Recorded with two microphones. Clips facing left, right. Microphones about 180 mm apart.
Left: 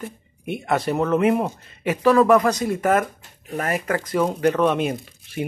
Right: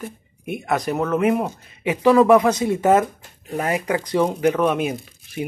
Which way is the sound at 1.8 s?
15° right (ahead or behind).